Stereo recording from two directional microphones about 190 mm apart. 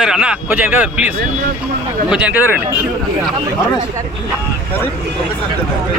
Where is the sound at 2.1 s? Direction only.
5° right (ahead or behind).